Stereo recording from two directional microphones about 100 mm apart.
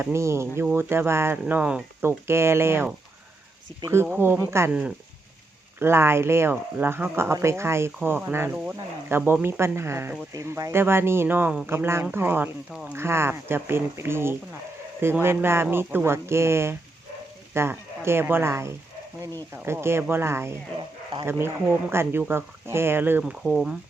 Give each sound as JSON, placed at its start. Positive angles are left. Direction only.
{"t": 0.0, "sound": "speech", "side_deg": -30}
{"t": 2.0, "sound": "speech", "side_deg": -25}
{"t": 3.9, "sound": "speech", "side_deg": -20}
{"t": 4.7, "sound": "speech", "side_deg": -10}
{"t": 5.8, "sound": "speech", "side_deg": -25}
{"t": 20.7, "sound": "speech", "side_deg": -50}
{"t": 21.2, "sound": "speech", "side_deg": -25}
{"t": 23.2, "sound": "speech", "side_deg": -5}